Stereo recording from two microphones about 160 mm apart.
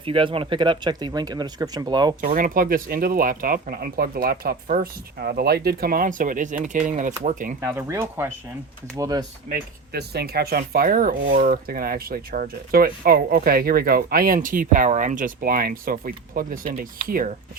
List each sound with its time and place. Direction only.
0.0 s speech: 35° right (ahead or behind)
2.2 s speech: 60° right (ahead or behind)
7.6 s speech: 15° right (ahead or behind)
9.5 s speech: 80° right; by 17.3 s 65° right (ahead or behind)